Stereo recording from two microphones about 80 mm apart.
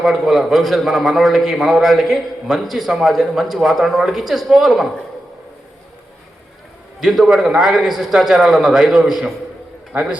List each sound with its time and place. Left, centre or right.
0.0 s a man's voice: centre
7.0 s a man's voice: centre